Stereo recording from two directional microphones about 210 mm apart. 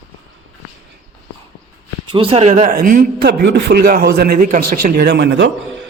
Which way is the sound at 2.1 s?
25° right (ahead or behind).